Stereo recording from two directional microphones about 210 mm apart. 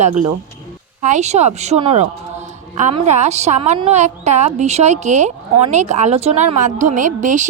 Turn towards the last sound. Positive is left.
turn(degrees=-35)  # may be behind; listen again after turning